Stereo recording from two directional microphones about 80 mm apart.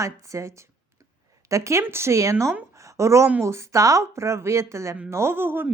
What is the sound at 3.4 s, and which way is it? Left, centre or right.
A woman's voice, right.